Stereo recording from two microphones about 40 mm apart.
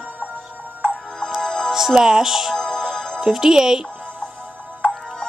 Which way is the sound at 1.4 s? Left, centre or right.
Centre.